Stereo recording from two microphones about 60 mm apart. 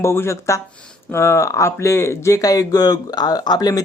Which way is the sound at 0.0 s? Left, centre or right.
Left.